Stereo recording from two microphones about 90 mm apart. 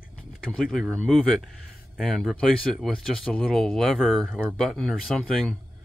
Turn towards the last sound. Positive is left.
turn(degrees=5)  # may be behind; listen again after turning